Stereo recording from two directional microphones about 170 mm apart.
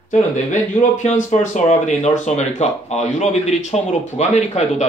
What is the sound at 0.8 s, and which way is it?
Speech, 45° left (ahead or behind).